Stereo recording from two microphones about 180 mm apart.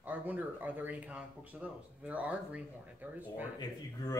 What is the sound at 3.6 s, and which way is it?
Speech, 20° left (ahead or behind).